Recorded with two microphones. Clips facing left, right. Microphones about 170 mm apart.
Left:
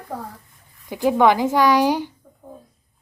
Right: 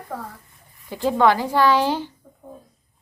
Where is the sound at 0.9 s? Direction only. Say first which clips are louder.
Left 2 dB; 15° left (ahead or behind).